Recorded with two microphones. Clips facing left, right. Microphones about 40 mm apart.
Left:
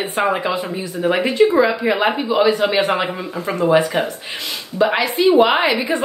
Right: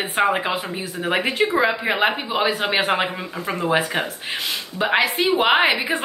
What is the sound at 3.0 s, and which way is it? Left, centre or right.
Speech, centre.